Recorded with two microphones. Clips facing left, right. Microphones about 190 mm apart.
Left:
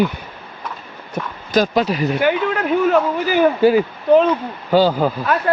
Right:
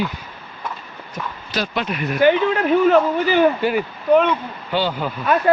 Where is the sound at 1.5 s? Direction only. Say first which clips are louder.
Left 8 dB; 40° left (ahead or behind).